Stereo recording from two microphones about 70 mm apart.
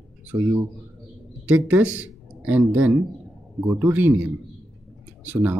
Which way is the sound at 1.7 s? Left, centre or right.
Right.